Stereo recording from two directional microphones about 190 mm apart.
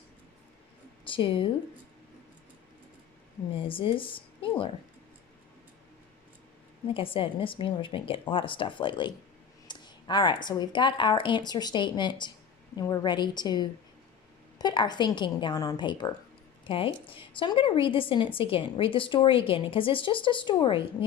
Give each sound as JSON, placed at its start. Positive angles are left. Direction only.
{"t": 1.0, "sound": "speech", "side_deg": 25}
{"t": 3.6, "sound": "a woman's voice", "side_deg": 25}
{"t": 6.8, "sound": "a woman's voice", "side_deg": 30}